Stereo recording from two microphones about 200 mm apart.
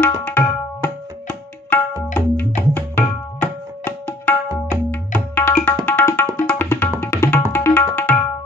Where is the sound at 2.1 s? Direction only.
10° left (ahead or behind).